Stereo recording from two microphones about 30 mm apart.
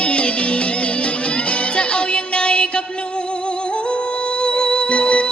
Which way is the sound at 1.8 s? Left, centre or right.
Left.